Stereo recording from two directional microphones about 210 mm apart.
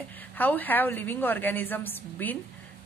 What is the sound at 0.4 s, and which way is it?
A woman's voice, 10° left (ahead or behind).